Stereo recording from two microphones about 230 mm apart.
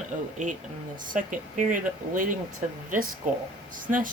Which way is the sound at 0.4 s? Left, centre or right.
Right.